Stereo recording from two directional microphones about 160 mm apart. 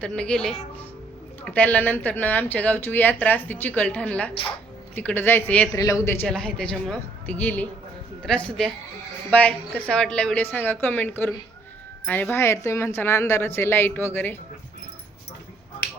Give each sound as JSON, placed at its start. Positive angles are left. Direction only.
{"t": 0.0, "sound": "speech", "side_deg": 5}
{"t": 6.2, "sound": "a man's voice", "side_deg": 5}